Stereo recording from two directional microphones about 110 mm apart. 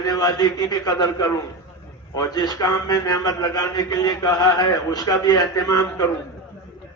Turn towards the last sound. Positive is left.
turn(degrees=35)  # may be behind; listen again after turning